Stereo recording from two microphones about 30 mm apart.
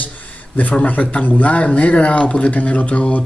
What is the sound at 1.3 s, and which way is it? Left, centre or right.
Speech, left.